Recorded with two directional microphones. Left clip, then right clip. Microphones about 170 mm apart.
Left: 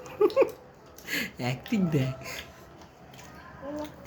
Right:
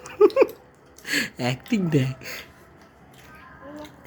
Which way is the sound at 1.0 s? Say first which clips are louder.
Right 6 dB; 60° right (ahead or behind).